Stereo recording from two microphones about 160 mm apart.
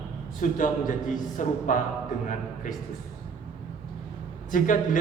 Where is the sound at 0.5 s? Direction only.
55° left (ahead or behind).